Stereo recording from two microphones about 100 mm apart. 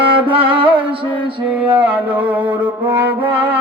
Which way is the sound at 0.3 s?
60° right (ahead or behind).